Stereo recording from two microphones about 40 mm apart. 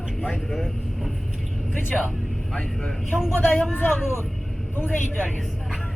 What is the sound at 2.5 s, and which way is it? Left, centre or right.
Speech, left.